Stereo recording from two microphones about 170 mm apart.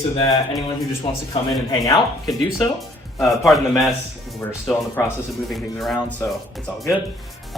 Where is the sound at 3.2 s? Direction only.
Centre (ahead or behind).